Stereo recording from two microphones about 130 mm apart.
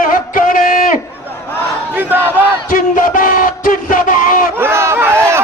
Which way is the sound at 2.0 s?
15° right (ahead or behind).